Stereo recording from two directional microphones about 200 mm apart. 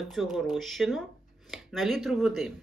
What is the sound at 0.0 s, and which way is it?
Speech, centre (ahead or behind).